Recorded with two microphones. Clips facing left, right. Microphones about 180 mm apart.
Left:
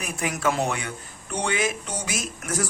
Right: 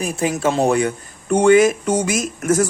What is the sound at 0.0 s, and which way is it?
Speech, 30° right (ahead or behind).